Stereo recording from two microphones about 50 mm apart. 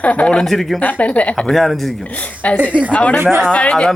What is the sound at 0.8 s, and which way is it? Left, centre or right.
Speech, left.